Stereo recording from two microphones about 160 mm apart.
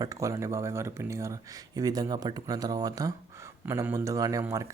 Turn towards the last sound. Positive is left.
turn(degrees=-20)  # may be behind; listen again after turning